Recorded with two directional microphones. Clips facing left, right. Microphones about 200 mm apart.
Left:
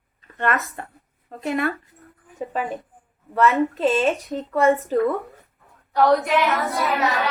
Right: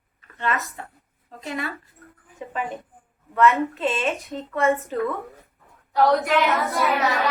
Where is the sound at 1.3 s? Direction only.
55° left (ahead or behind).